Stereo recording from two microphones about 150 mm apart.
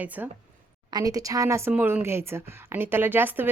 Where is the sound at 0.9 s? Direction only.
25° right (ahead or behind).